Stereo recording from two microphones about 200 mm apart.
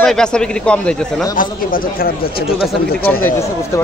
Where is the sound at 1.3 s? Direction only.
45° left (ahead or behind).